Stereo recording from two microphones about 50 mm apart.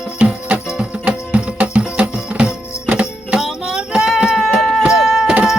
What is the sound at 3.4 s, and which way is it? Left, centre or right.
Music, centre.